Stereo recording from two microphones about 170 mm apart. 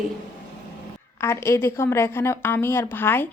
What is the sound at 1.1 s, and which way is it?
A woman's voice, 15° left (ahead or behind).